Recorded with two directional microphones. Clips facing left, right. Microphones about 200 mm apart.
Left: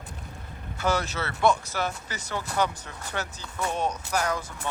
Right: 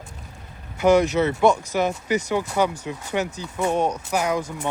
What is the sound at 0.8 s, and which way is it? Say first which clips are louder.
Speech: right 11 dB; 15° right (ahead or behind).